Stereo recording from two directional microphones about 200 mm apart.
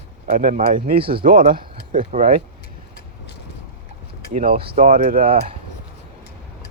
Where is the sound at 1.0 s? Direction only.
25° right (ahead or behind).